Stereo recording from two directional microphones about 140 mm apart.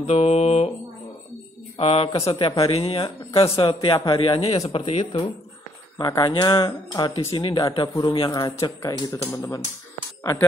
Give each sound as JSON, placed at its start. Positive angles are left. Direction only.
{"t": 0.0, "sound": "speech", "side_deg": 50}
{"t": 1.8, "sound": "speech", "side_deg": 45}
{"t": 5.9, "sound": "speech", "side_deg": 30}
{"t": 9.1, "sound": "speech", "side_deg": 20}